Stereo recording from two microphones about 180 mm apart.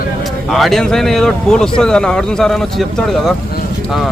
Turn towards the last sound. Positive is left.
turn(degrees=0)  # may be behind; listen again after turning